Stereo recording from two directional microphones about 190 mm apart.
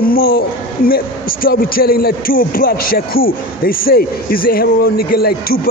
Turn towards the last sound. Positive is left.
turn(degrees=55)  # may be behind; listen again after turning